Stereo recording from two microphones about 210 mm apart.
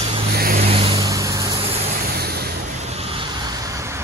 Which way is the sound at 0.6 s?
25° right (ahead or behind).